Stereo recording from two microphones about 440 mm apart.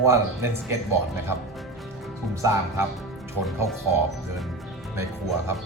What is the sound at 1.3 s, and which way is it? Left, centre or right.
Speech, right.